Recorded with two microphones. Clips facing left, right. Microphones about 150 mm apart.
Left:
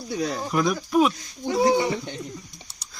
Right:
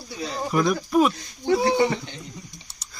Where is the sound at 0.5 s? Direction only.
Centre (ahead or behind).